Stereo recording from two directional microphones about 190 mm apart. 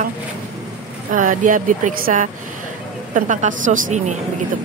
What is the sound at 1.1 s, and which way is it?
A woman's voice, 45° right (ahead or behind).